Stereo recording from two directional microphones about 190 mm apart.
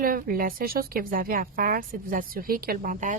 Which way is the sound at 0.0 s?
50° right (ahead or behind).